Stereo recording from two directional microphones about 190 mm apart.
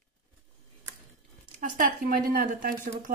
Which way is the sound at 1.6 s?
45° right (ahead or behind).